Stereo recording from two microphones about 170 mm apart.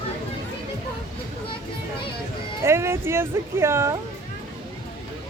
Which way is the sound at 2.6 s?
15° right (ahead or behind).